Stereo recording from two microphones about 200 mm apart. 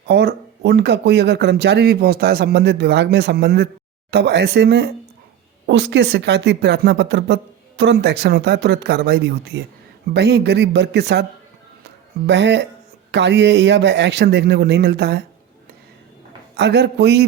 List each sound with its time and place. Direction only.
0.1 s speech: 55° right (ahead or behind)
16.6 s speech: 60° right (ahead or behind)